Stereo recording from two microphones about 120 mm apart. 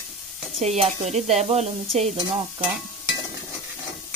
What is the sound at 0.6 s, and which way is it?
Sizzle, 65° right (ahead or behind).